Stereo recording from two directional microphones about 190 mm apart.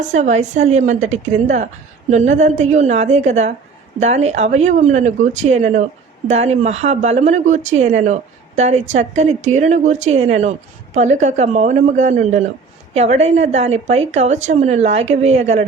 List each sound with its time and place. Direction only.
0.0 s speech: 40° right (ahead or behind)